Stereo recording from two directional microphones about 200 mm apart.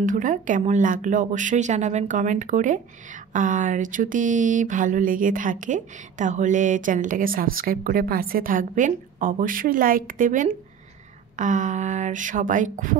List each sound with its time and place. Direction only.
0.0 s speech: 40° right (ahead or behind)